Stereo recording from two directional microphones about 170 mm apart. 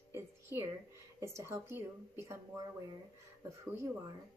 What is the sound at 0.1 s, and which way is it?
A woman's voice, 15° right (ahead or behind).